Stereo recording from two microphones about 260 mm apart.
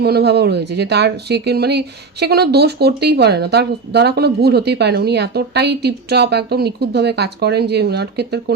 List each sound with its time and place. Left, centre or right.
0.0 s speech: right